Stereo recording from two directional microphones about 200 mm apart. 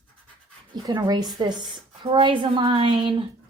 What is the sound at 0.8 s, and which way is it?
A woman's voice, 20° right (ahead or behind).